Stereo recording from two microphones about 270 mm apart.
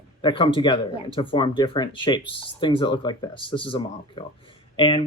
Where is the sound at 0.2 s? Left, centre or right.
Centre.